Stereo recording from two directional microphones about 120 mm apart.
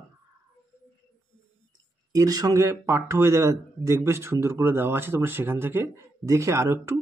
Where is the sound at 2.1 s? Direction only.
30° right (ahead or behind).